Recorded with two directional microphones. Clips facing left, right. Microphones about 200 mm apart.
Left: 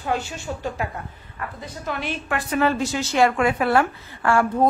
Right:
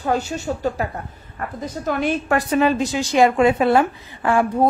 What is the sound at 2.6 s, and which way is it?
A woman's voice, 15° right (ahead or behind).